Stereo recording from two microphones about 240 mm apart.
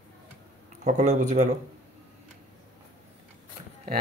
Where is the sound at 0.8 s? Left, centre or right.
Right.